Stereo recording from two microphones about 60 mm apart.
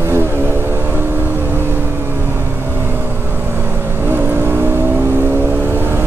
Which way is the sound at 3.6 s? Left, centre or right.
Right.